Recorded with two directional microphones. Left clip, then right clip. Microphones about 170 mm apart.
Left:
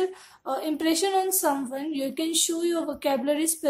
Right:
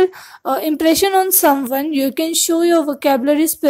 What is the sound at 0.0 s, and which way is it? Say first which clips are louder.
A woman's voice: right 13 dB; 45° right (ahead or behind).